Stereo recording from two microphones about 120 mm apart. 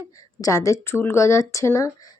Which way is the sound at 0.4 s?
25° left (ahead or behind).